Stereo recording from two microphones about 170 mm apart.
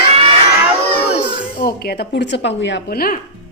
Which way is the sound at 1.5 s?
65° left (ahead or behind).